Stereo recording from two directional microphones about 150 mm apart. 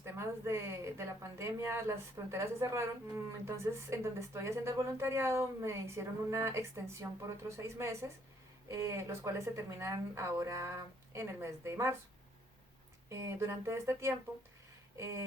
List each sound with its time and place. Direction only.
0.0 s speech: 15° right (ahead or behind)
13.1 s speech: 20° right (ahead or behind)